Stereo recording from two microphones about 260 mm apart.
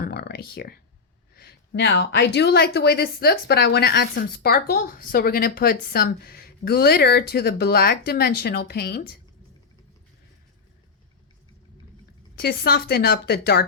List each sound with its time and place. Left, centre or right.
0.0 s a sound: left
1.4 s a woman's voice: left
12.4 s a woman's voice: left